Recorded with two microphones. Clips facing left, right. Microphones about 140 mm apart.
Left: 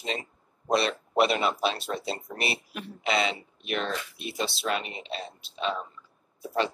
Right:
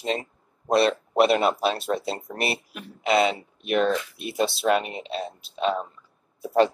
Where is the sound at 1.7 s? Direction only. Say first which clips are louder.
Right 5 dB; 55° right (ahead or behind).